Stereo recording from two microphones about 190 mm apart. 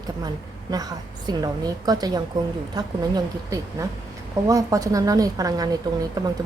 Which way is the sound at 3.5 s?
15° right (ahead or behind).